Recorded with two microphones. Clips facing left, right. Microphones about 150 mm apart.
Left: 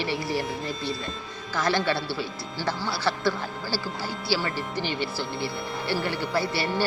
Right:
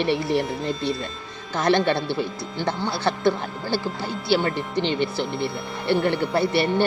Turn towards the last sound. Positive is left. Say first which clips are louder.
# right 6 dB
turn(degrees=-20)  # may be behind; listen again after turning